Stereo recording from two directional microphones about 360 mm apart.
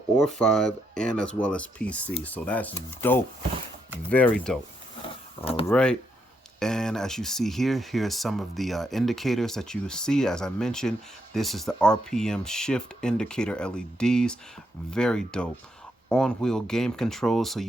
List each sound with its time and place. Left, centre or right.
0.2 s speech: centre
5.5 s speech: centre
5.7 s speech: centre